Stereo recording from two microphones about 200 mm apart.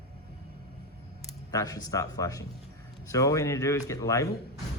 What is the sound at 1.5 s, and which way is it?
Speech, 20° left (ahead or behind).